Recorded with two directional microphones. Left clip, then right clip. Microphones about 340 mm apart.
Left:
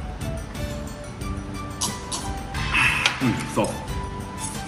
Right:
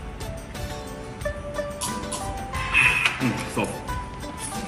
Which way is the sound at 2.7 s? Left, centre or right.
Centre.